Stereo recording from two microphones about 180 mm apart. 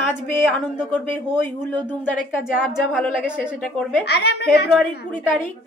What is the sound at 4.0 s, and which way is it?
A woman's voice, 65° left (ahead or behind).